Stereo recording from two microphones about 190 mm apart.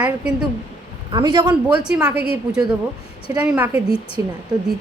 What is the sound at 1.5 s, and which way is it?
Speech, 5° right (ahead or behind).